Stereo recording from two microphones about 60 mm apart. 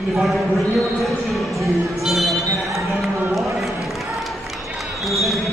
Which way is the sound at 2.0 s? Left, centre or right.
Centre.